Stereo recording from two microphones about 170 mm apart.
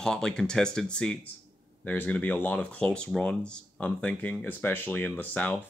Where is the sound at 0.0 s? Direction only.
5° left (ahead or behind).